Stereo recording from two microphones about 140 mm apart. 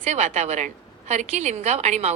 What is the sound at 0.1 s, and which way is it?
A woman's voice, 55° right (ahead or behind).